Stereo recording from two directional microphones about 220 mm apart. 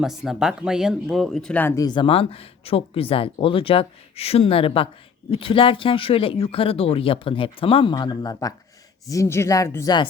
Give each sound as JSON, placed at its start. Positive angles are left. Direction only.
{"t": 0.0, "sound": "speech", "side_deg": 0}